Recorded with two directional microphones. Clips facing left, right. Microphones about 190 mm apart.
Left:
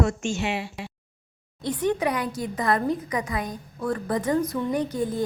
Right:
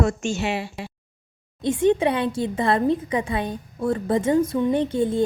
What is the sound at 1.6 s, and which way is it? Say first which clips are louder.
A woman's voice: right 6 dB; 25° right (ahead or behind).